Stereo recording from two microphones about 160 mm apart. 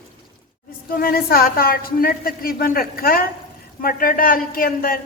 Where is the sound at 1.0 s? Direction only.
65° left (ahead or behind).